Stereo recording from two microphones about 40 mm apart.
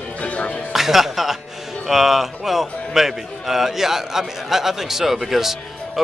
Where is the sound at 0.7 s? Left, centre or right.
Centre.